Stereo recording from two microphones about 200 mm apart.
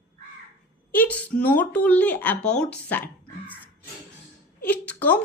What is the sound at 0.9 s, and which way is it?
Speech, 10° left (ahead or behind).